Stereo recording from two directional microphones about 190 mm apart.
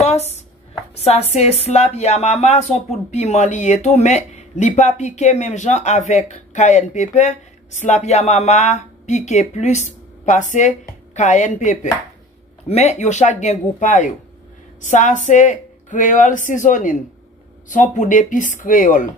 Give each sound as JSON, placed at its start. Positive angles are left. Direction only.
{"t": 0.9, "sound": "speech", "side_deg": 35}